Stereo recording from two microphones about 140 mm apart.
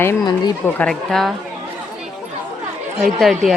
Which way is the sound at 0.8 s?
5° left (ahead or behind).